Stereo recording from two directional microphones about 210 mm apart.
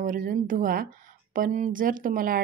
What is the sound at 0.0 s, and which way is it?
Speech, 40° right (ahead or behind).